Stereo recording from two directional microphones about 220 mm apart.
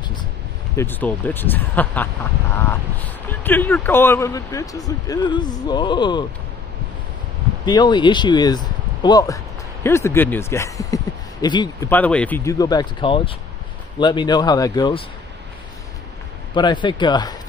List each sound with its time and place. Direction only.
0.7 s speech: 10° left (ahead or behind)
2.6 s speech: 10° left (ahead or behind)
7.6 s speech: 20° left (ahead or behind)
11.9 s speech: 5° left (ahead or behind)
16.5 s speech: 20° left (ahead or behind)